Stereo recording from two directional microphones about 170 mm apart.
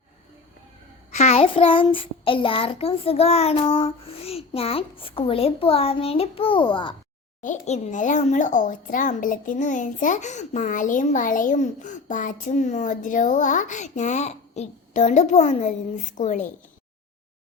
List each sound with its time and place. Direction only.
1.1 s child singing: 40° left (ahead or behind)
7.4 s a child's voice: 45° left (ahead or behind)